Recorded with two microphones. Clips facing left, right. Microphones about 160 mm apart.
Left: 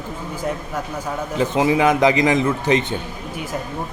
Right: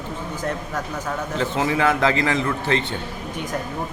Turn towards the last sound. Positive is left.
turn(degrees=20)  # may be behind; listen again after turning